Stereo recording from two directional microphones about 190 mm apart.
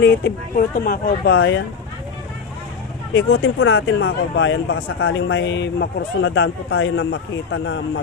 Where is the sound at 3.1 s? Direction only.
90° left.